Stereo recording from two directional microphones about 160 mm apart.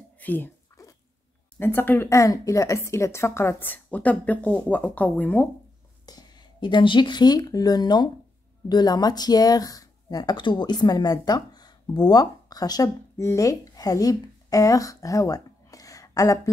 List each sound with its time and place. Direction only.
0.2 s a sound: 10° left (ahead or behind)
1.6 s a woman's voice: 15° left (ahead or behind)
6.0 s speech: 25° left (ahead or behind)